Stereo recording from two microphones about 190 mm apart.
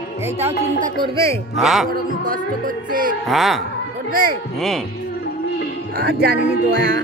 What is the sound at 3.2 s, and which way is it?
Speech, centre (ahead or behind).